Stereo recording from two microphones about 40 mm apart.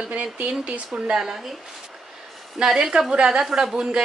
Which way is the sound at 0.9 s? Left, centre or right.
Centre.